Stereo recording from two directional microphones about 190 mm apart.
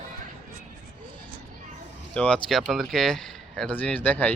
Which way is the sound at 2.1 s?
5° left (ahead or behind).